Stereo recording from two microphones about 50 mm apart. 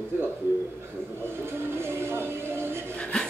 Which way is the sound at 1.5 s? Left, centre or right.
Right.